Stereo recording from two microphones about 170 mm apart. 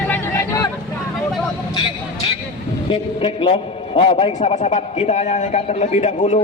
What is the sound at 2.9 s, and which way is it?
A man's voice, 30° left (ahead or behind).